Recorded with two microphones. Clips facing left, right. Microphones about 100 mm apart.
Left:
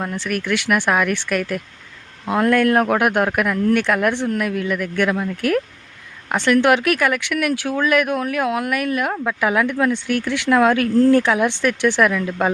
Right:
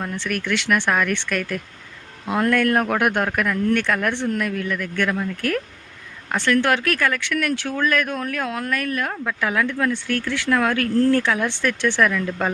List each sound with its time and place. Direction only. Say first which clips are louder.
0.0 s speech: left 2 dB; 5° left (ahead or behind)